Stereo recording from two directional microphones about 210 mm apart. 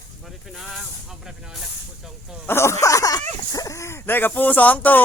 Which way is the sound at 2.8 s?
15° left (ahead or behind).